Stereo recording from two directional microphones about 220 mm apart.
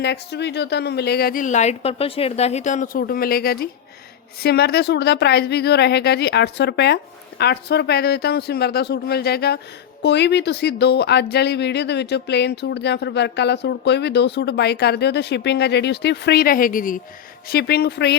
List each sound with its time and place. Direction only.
0.0 s speech: 50° left (ahead or behind)